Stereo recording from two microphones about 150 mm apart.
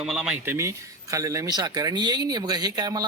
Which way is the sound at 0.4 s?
20° right (ahead or behind).